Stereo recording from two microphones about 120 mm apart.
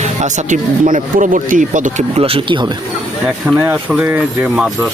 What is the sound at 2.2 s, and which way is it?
Speech, 50° right (ahead or behind).